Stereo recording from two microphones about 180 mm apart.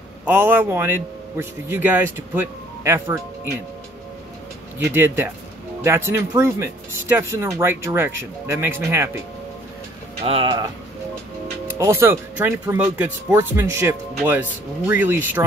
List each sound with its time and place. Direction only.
0.2 s speech: 10° right (ahead or behind)
4.7 s speech: 10° right (ahead or behind)
10.2 s speech: 30° right (ahead or behind)
11.6 s speech: 15° right (ahead or behind)